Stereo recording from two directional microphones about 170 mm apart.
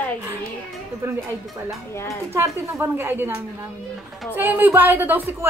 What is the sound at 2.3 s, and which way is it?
A woman's voice, 15° right (ahead or behind).